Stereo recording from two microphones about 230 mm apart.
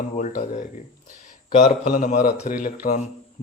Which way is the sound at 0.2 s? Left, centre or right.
Left.